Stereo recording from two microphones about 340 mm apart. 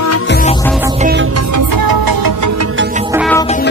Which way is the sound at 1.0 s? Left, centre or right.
Right.